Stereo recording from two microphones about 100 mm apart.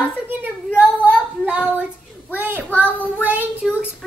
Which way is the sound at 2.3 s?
20° right (ahead or behind).